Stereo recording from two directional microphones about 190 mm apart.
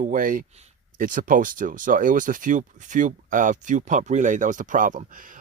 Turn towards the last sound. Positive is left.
turn(degrees=-45)  # may be behind; listen again after turning